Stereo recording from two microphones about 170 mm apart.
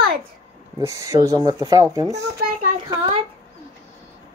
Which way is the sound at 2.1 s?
60° right (ahead or behind).